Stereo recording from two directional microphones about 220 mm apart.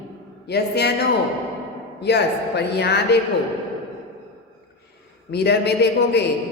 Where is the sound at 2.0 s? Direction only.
50° left (ahead or behind).